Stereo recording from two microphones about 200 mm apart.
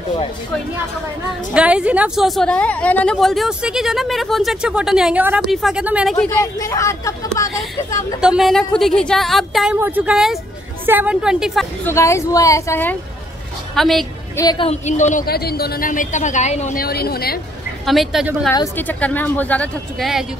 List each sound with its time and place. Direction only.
1.5 s a woman's voice: 5° right (ahead or behind)
6.1 s speech: 15° left (ahead or behind)
8.2 s a woman's voice: 5° right (ahead or behind)
11.8 s speech: 15° left (ahead or behind)
13.7 s a woman's voice: centre (ahead or behind)
14.3 s a woman's voice: 20° left (ahead or behind)
14.7 s a woman's voice: 35° left (ahead or behind)
16.8 s a woman's voice: 50° left (ahead or behind)
17.8 s a woman's voice: centre (ahead or behind)
18.5 s speech: 15° left (ahead or behind)